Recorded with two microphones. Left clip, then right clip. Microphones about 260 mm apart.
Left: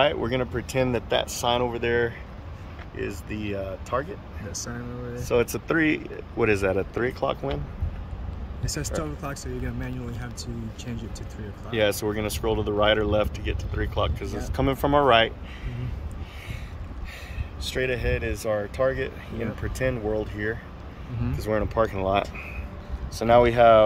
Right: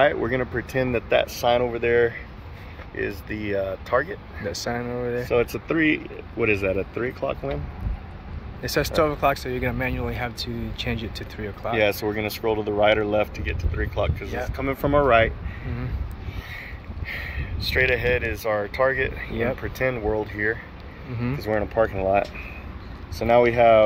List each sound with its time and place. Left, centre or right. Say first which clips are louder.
0.0 s speech: right 3 dB; centre
4.5 s speech: right 9 dB; centre
5.3 s speech: left 1 dB; centre
8.8 s speech: right 13 dB; centre
10.4 s speech: right 8 dB; centre
11.7 s speech: right 2 dB; centre
17.7 s speech: right 6 dB; centre